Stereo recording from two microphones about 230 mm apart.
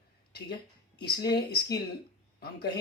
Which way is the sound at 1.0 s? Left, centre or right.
Left.